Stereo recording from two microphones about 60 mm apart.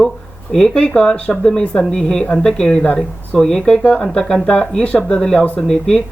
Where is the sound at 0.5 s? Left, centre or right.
Centre.